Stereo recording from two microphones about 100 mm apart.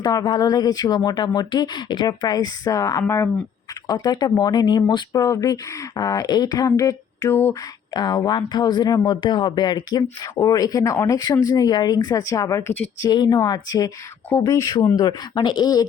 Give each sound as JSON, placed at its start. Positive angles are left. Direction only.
{"t": 0.0, "sound": "speech", "side_deg": 45}
{"t": 7.9, "sound": "speech", "side_deg": 45}
{"t": 10.3, "sound": "speech", "side_deg": 35}
{"t": 13.1, "sound": "speech", "side_deg": 45}